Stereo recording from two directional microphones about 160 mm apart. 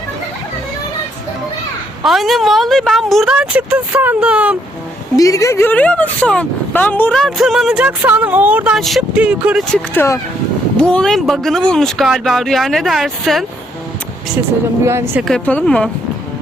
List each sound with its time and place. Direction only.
2.0 s speech: centre (ahead or behind)
5.1 s speech: 20° left (ahead or behind); by 9.6 s 5° right (ahead or behind)
9.7 s speech: 15° left (ahead or behind)
14.8 s speech: 15° right (ahead or behind)
15.2 s speech: 5° left (ahead or behind)